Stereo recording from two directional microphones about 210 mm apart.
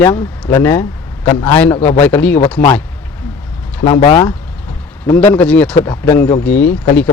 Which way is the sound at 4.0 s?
20° left (ahead or behind).